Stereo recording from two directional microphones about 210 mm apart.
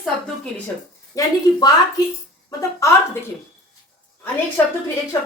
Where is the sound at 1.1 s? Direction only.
20° left (ahead or behind).